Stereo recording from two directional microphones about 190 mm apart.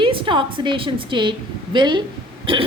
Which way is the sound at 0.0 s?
25° right (ahead or behind).